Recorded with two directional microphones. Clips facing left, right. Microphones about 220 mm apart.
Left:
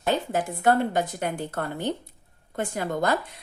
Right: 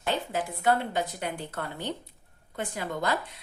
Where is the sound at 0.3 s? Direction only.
45° left (ahead or behind).